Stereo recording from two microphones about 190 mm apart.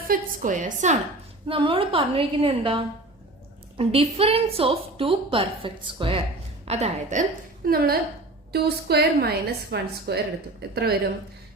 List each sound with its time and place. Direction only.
0.1 s a woman's voice: 45° right (ahead or behind)
1.5 s a woman's voice: 30° right (ahead or behind); by 11.1 s 55° right (ahead or behind)